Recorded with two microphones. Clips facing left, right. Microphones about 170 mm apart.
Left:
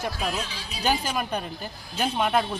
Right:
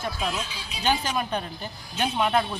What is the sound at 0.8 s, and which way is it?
Speech, 5° left (ahead or behind).